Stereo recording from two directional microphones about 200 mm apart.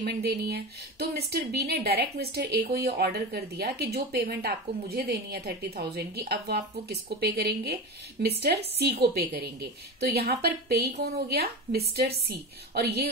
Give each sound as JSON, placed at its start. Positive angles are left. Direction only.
{"t": 0.0, "sound": "speech", "side_deg": -55}